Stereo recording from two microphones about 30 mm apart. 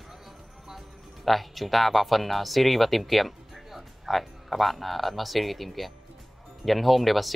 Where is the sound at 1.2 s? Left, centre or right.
Centre.